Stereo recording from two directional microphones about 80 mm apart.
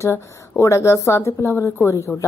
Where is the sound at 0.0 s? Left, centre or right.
Left.